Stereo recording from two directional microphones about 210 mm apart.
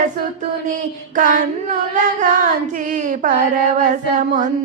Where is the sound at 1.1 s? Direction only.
40° right (ahead or behind).